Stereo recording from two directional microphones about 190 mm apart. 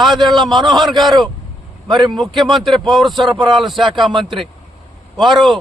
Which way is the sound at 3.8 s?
25° right (ahead or behind).